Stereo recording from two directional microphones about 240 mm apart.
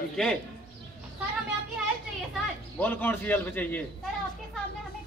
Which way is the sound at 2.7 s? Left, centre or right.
Centre.